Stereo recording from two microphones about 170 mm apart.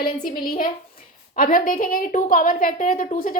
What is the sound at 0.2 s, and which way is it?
A woman's voice, 60° left (ahead or behind).